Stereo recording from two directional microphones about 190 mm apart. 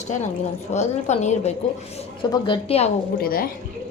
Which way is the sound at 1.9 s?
25° left (ahead or behind).